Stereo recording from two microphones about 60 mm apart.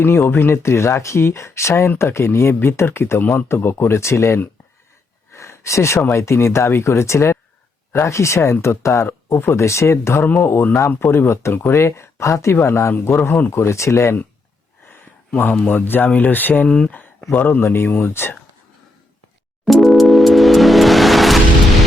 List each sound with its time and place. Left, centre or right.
0.0 s speech: left
5.3 s a sound: left
6.1 s speech: left
10.4 s speech: left
12.9 s speech: left
13.5 s speech: left
15.6 s speech: left
16.6 s speech: centre
16.9 s a sound: left
17.3 s speech: left
19.6 s music: centre